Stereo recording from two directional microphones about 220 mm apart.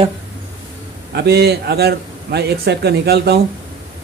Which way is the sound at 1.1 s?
45° right (ahead or behind).